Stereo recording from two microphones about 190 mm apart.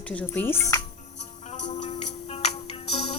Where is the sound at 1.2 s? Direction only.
35° left (ahead or behind).